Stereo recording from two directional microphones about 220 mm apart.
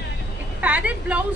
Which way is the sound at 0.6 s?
5° right (ahead or behind).